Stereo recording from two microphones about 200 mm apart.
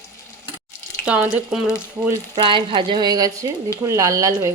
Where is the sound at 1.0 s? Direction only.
5° right (ahead or behind).